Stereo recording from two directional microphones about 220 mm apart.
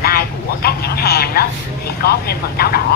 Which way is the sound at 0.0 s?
45° left (ahead or behind).